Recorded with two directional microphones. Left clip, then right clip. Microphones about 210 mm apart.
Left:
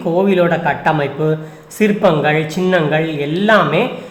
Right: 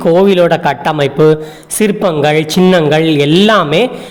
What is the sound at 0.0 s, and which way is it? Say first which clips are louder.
A man's voice: right 6 dB; 40° right (ahead or behind).